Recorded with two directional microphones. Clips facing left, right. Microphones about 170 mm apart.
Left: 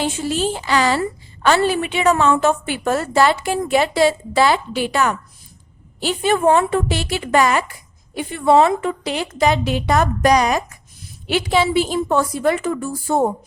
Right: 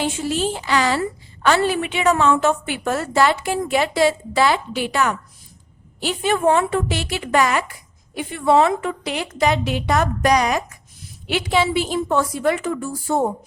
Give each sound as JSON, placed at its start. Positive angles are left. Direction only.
{"t": 0.0, "sound": "a woman's voice", "side_deg": 35}